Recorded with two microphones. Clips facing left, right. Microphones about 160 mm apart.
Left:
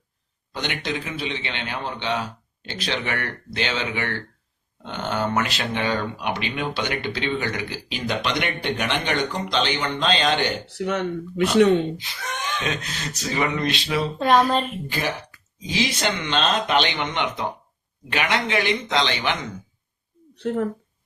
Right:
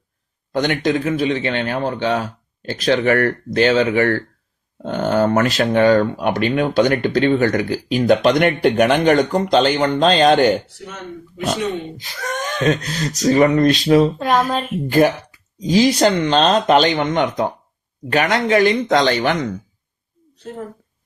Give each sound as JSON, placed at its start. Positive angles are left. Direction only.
{"t": 0.5, "sound": "speech", "side_deg": -45}
{"t": 10.8, "sound": "speech", "side_deg": 75}
{"t": 11.9, "sound": "speech", "side_deg": -45}
{"t": 14.2, "sound": "speech", "side_deg": -5}
{"t": 14.8, "sound": "speech", "side_deg": -50}
{"t": 20.3, "sound": "speech", "side_deg": 70}